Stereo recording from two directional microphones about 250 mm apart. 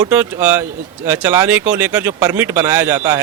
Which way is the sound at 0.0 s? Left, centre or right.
Centre.